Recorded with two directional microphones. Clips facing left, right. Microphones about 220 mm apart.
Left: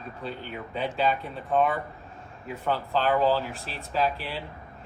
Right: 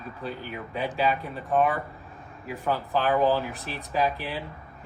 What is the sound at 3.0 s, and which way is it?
Speech, 15° right (ahead or behind).